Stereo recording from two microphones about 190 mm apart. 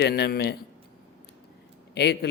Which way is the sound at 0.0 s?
60° left (ahead or behind).